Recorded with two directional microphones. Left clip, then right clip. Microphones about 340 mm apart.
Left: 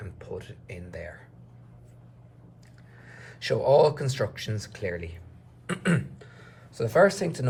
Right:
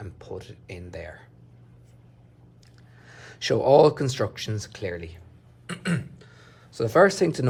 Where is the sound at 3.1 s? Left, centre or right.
Centre.